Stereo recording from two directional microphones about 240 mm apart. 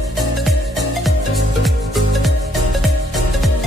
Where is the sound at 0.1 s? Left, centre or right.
Centre.